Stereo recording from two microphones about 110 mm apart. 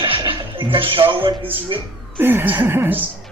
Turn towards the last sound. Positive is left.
turn(degrees=-20)  # may be behind; listen again after turning